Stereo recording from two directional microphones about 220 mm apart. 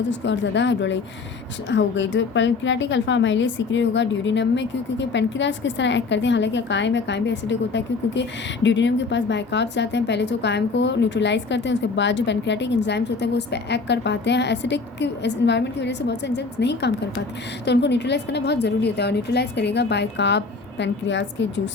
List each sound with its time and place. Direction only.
0.1 s a woman's voice: 55° left (ahead or behind)